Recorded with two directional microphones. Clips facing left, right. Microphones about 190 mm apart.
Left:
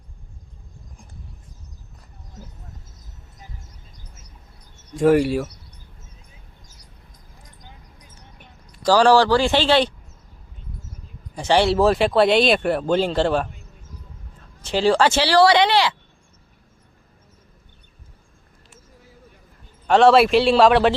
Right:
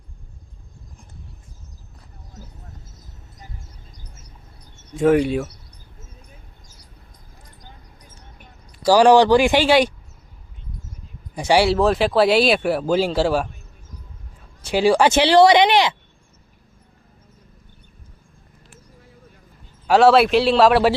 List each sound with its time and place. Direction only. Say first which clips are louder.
4.9 s speech: even; 5° left (ahead or behind)
8.8 s speech: right 2 dB; 15° right (ahead or behind)
11.3 s speech: right 1 dB; 10° right (ahead or behind)
14.6 s speech: right 2 dB; 10° right (ahead or behind)
19.9 s speech: even; 5° right (ahead or behind)